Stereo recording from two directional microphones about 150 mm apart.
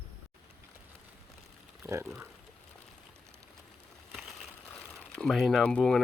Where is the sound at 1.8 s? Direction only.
15° right (ahead or behind).